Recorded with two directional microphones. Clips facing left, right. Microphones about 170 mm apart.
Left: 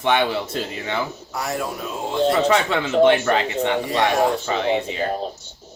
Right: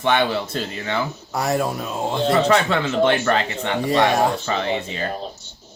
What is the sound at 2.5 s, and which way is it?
Speech, 15° left (ahead or behind).